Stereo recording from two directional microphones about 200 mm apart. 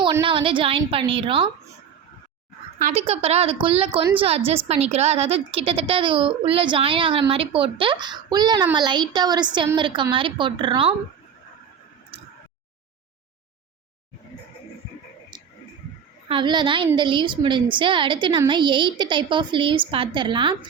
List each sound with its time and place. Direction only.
0.0 s a woman's voice: 25° right (ahead or behind)
2.8 s a woman's voice: 30° right (ahead or behind)
16.3 s a woman's voice: 25° right (ahead or behind)